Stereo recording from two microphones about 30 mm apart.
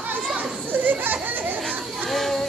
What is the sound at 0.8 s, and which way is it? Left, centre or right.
Children playing, right.